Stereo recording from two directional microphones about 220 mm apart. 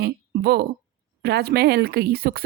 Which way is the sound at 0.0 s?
45° right (ahead or behind).